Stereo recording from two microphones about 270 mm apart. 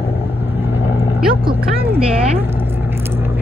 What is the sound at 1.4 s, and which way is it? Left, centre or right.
Speech, centre.